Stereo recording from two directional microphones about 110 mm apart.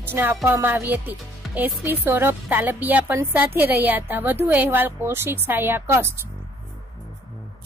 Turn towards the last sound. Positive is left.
turn(degrees=-20)  # may be behind; listen again after turning